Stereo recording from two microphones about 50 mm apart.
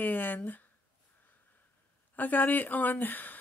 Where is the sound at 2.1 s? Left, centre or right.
Left.